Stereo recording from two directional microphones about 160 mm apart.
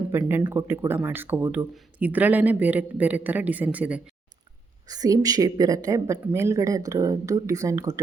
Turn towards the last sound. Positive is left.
turn(degrees=-20)  # may be behind; listen again after turning